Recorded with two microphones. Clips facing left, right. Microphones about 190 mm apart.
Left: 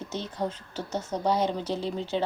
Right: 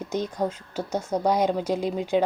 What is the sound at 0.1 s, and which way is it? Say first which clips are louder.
Speech: right 5 dB; 10° right (ahead or behind).